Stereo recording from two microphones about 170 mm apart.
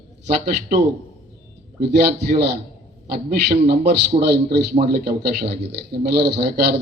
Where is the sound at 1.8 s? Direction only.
75° right (ahead or behind).